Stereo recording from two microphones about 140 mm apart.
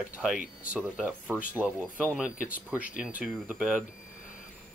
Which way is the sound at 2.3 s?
75° left (ahead or behind).